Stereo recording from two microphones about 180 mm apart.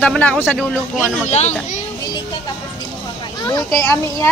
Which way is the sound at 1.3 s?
40° left (ahead or behind).